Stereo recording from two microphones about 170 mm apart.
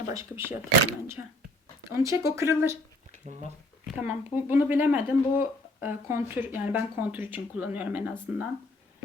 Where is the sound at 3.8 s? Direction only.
10° right (ahead or behind).